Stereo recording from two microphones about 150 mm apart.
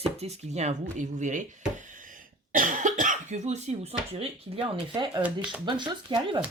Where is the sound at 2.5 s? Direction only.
60° right (ahead or behind).